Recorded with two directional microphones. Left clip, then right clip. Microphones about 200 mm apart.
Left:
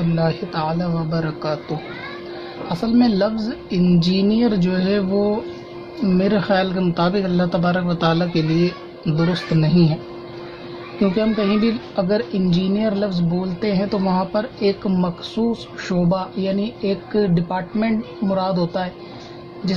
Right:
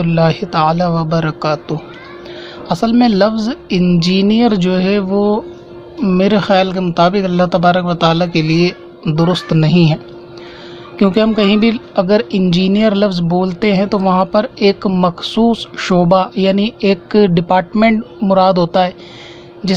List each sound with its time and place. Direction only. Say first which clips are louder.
0.1 s a woman's voice: right 9 dB; 30° right (ahead or behind)
11.0 s a woman's voice: right 7 dB; 25° right (ahead or behind)